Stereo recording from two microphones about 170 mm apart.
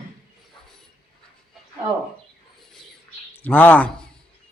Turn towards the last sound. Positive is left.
turn(degrees=10)  # may be behind; listen again after turning